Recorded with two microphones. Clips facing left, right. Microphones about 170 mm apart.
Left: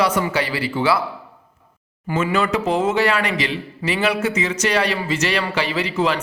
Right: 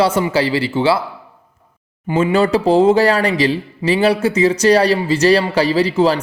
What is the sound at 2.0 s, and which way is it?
Speech, 30° right (ahead or behind).